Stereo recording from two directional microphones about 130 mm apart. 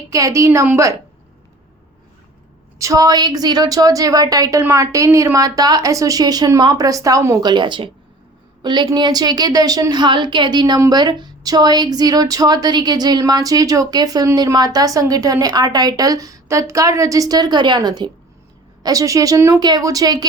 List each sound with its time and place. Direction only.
0.1 s a woman's voice: 25° right (ahead or behind)
2.7 s a woman's voice: 25° right (ahead or behind)
7.5 s a woman's voice: 35° right (ahead or behind)